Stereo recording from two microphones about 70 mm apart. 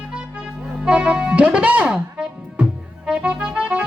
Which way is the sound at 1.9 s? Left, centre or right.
Centre.